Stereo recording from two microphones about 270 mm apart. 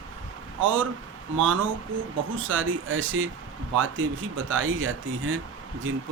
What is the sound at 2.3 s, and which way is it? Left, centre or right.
Speech, right.